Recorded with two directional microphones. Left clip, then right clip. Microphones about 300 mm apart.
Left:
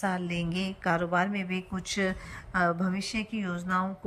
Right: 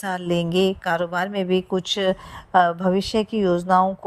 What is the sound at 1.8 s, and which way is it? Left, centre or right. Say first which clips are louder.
A woman's voice: right 9 dB; centre.